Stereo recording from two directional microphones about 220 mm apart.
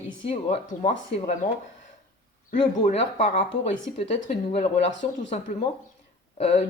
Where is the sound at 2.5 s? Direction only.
35° left (ahead or behind).